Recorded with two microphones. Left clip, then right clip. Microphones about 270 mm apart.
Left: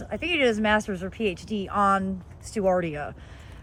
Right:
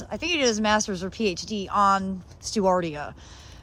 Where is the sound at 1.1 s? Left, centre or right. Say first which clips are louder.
Right 1 dB; right.